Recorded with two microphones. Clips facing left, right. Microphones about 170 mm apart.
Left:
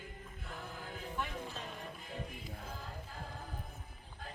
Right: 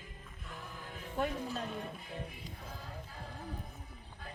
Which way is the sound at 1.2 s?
40° right (ahead or behind).